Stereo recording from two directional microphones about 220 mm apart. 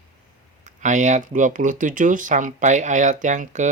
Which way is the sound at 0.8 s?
35° right (ahead or behind).